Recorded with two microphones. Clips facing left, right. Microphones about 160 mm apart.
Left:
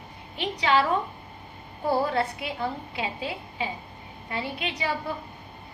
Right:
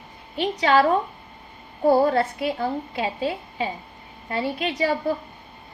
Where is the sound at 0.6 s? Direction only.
45° right (ahead or behind).